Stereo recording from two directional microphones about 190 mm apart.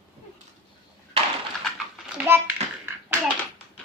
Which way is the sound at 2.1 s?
5° right (ahead or behind).